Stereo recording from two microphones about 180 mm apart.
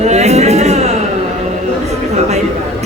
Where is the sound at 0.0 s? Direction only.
40° right (ahead or behind).